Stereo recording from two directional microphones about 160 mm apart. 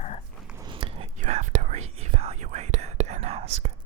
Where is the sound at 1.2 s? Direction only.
50° right (ahead or behind).